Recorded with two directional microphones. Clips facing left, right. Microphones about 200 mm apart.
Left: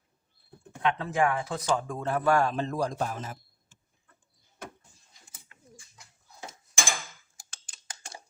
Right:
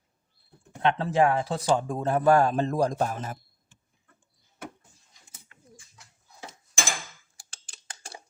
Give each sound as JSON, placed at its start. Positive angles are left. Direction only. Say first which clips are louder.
{"t": 0.8, "sound": "speech", "louder": "right 4 dB", "side_deg": -30}
{"t": 7.3, "sound": "tick-tock", "louder": "right 1 dB", "side_deg": -35}